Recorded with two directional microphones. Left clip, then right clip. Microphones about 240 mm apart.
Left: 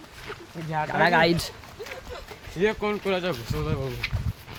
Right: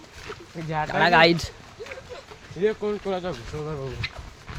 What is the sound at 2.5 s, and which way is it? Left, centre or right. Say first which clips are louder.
Speech: even; left.